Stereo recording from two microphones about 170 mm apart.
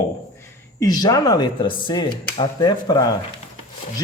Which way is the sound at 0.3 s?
20° left (ahead or behind).